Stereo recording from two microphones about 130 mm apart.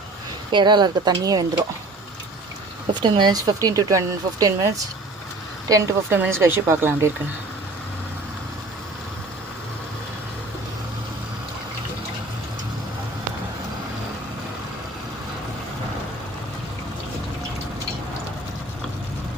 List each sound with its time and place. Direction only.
0.5 s speech: 35° right (ahead or behind)
3.0 s speech: 35° right (ahead or behind); by 7.1 s 20° right (ahead or behind)